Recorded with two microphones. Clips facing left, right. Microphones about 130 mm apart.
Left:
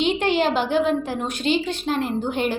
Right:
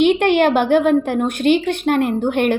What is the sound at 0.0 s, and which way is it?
A woman's voice, 60° right (ahead or behind).